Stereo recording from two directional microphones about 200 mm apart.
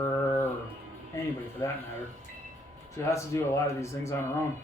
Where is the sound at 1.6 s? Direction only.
15° left (ahead or behind).